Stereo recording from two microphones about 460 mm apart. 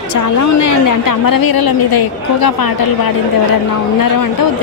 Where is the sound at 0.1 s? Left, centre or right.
Left.